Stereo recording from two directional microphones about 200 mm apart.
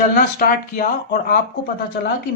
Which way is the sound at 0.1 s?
45° left (ahead or behind).